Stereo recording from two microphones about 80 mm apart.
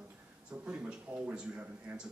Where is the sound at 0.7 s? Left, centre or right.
Centre.